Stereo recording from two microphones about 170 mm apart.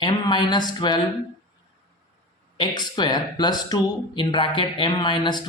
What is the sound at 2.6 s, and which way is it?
Speech, 25° left (ahead or behind).